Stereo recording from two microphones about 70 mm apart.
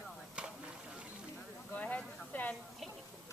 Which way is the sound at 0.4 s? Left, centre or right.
Centre.